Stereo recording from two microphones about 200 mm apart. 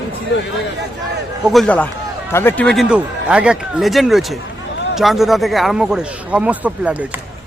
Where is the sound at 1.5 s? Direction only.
5° left (ahead or behind).